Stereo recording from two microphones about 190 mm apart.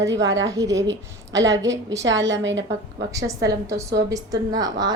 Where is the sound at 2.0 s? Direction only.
75° right (ahead or behind).